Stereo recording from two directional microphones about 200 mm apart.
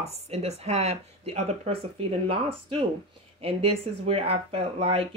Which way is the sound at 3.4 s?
30° right (ahead or behind).